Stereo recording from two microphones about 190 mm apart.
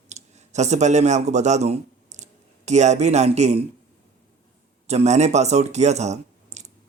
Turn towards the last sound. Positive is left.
turn(degrees=-35)  # may be behind; listen again after turning